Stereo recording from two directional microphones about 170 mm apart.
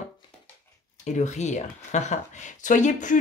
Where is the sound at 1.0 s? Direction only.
45° left (ahead or behind).